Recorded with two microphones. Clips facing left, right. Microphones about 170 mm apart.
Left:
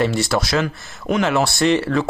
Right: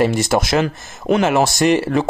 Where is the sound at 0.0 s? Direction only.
15° right (ahead or behind).